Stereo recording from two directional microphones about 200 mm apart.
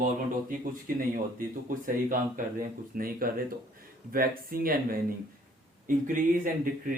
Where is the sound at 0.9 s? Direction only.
45° right (ahead or behind).